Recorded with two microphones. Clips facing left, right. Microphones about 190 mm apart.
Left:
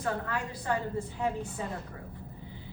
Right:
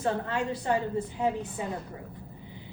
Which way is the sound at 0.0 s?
25° right (ahead or behind).